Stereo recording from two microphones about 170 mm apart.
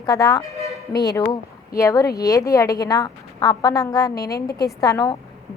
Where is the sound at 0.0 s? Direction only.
20° left (ahead or behind).